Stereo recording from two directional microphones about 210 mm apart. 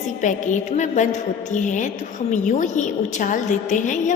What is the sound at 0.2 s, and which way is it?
A woman's voice, 35° left (ahead or behind).